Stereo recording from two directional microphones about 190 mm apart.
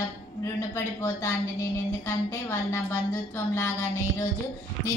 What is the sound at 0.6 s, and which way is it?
A woman's voice, 15° left (ahead or behind).